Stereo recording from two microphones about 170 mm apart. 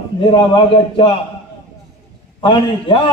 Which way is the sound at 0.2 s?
30° left (ahead or behind).